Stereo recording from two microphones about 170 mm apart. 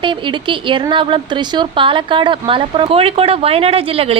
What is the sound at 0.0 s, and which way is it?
A woman's voice, 30° right (ahead or behind).